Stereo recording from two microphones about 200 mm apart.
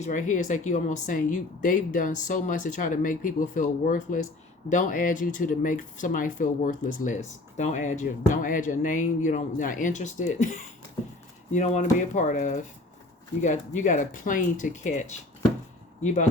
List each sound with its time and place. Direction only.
0.0 s speech: 40° left (ahead or behind)
11.5 s speech: 35° left (ahead or behind)